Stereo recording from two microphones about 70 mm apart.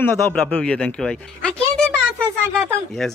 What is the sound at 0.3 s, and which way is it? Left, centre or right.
Speech, centre.